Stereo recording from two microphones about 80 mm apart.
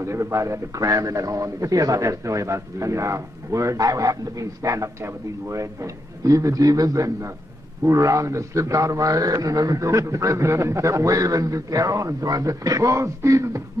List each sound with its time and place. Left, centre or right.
0.0 s a man's voice: right